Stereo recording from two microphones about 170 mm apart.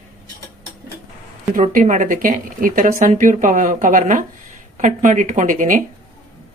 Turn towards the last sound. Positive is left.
turn(degrees=-50)  # may be behind; listen again after turning